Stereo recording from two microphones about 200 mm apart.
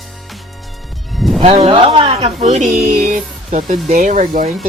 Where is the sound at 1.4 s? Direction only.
30° right (ahead or behind).